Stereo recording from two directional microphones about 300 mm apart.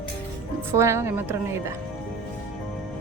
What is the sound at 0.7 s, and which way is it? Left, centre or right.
A woman's voice, centre.